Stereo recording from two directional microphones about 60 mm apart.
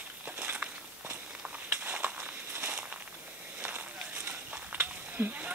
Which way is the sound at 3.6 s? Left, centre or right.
Right.